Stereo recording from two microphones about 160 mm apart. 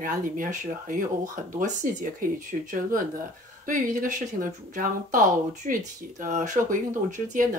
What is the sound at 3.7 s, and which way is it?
Speech, 55° right (ahead or behind).